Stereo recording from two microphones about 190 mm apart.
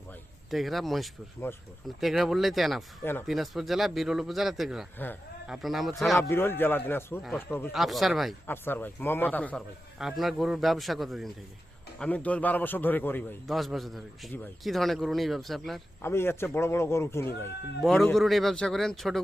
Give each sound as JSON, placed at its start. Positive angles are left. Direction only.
{"t": 0.5, "sound": "a man's voice", "side_deg": 0}
{"t": 3.0, "sound": "a man's voice", "side_deg": 10}
{"t": 3.2, "sound": "a man's voice", "side_deg": 0}
{"t": 6.1, "sound": "a man's voice", "side_deg": 15}
{"t": 7.7, "sound": "a man's voice", "side_deg": 0}
{"t": 8.4, "sound": "a man's voice", "side_deg": 10}
{"t": 16.0, "sound": "a man's voice", "side_deg": 10}
{"t": 17.8, "sound": "a man's voice", "side_deg": 0}